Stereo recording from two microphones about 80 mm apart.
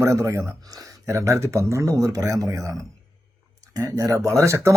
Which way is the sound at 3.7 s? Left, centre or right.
Right.